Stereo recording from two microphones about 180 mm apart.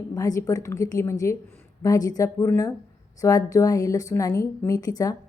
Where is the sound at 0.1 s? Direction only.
20° left (ahead or behind).